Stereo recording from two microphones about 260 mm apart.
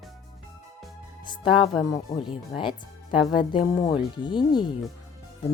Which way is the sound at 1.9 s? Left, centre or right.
Centre.